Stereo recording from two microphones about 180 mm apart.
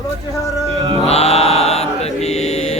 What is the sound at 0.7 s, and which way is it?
Speech, 35° right (ahead or behind).